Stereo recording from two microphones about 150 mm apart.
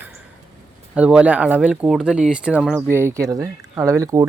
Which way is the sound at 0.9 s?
10° right (ahead or behind).